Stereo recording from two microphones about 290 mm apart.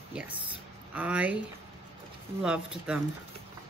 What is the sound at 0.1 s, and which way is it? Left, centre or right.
Speech, centre.